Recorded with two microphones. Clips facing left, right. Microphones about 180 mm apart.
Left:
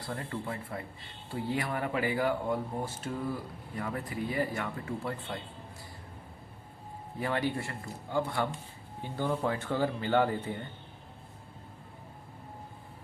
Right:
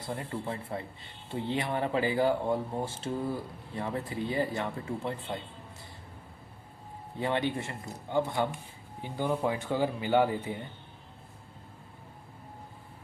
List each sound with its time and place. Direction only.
0.0 s speech: 20° right (ahead or behind)
7.2 s speech: 20° right (ahead or behind)